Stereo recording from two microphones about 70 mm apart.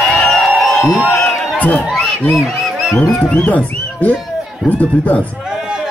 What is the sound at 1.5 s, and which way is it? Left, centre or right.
Crowd, left.